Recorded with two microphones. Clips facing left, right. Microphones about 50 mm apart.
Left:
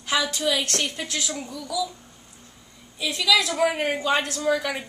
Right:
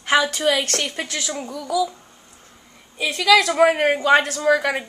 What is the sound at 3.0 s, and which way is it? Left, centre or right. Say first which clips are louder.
A woman's voice: right 6 dB; right.